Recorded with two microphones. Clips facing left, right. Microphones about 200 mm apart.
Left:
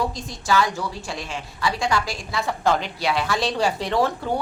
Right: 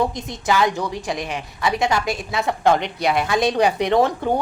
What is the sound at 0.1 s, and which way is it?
A woman's voice, 20° right (ahead or behind).